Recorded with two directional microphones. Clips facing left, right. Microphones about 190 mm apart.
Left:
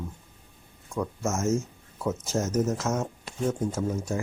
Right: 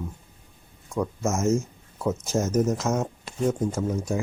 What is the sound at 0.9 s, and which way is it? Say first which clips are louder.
Speech: right 3 dB; 15° right (ahead or behind).